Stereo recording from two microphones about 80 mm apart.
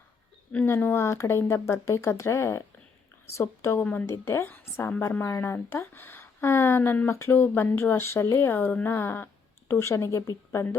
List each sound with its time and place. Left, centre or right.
0.5 s speech: left
4.4 s a woman's voice: left